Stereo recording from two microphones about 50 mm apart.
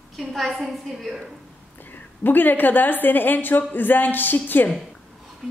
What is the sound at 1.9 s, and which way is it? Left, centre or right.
A woman's voice, left.